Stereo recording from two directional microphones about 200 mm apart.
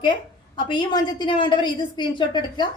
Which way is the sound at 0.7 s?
25° left (ahead or behind).